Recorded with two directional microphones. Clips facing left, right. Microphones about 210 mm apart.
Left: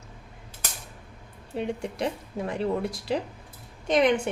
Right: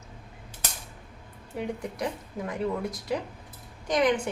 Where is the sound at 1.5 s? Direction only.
25° left (ahead or behind).